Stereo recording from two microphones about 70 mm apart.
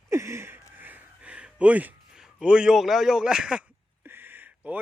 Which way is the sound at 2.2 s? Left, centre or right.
Centre.